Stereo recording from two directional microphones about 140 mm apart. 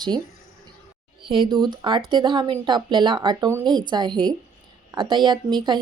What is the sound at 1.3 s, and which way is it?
A woman's voice, 35° right (ahead or behind).